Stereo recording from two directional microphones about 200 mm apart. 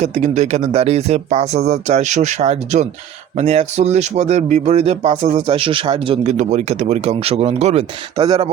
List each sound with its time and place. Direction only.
0.0 s speech: 35° right (ahead or behind)
6.2 s speech: 35° right (ahead or behind)
8.1 s speech: 20° right (ahead or behind)